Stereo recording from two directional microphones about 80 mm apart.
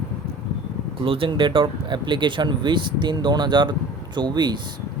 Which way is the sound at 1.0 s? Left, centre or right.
Right.